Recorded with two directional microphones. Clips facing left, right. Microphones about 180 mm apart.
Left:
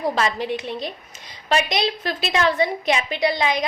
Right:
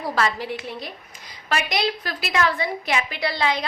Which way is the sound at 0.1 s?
20° left (ahead or behind).